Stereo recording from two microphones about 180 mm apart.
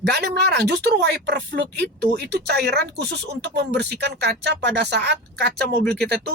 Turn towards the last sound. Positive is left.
turn(degrees=-65)  # may be behind; listen again after turning